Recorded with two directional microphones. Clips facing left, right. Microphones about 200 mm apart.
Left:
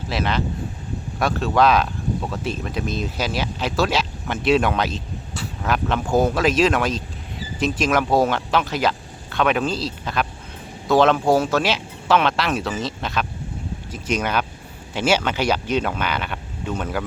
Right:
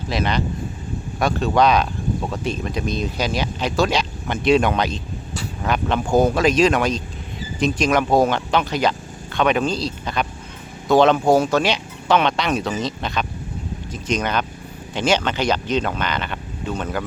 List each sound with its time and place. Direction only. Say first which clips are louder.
0.1 s speech: right 1 dB; centre (ahead or behind)